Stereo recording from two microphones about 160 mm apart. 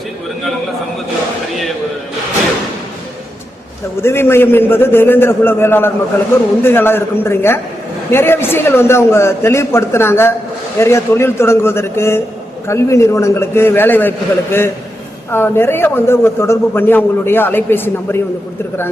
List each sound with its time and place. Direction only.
4.0 s a man's voice: 15° left (ahead or behind)
15.3 s a man's voice: 15° left (ahead or behind)